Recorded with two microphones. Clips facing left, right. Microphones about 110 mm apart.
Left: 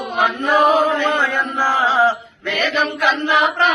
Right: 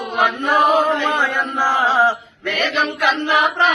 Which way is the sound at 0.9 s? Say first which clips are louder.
Left 1 dB; 10° right (ahead or behind).